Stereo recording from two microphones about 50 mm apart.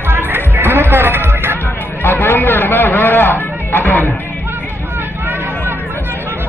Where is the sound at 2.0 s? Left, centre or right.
Left.